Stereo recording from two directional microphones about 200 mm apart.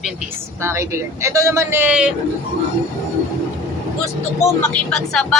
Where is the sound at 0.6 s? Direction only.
15° right (ahead or behind).